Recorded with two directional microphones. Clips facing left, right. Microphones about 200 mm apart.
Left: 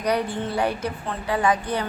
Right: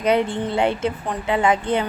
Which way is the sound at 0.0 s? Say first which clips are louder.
Right 4 dB; 25° right (ahead or behind).